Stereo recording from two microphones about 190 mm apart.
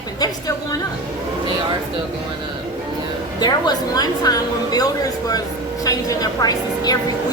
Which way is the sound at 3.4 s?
20° left (ahead or behind).